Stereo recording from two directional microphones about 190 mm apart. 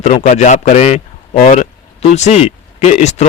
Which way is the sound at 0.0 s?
40° left (ahead or behind).